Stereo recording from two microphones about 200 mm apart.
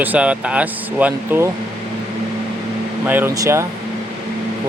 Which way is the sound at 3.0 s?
10° right (ahead or behind).